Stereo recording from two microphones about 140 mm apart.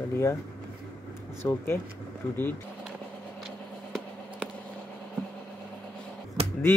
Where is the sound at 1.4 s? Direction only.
15° left (ahead or behind).